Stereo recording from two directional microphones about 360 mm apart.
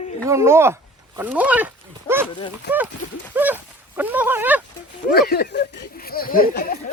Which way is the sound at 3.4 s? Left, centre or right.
Centre.